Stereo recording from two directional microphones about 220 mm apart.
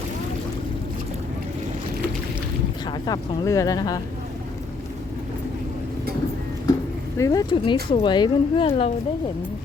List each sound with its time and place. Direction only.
2.8 s speech: 15° left (ahead or behind)
7.2 s speech: 15° left (ahead or behind)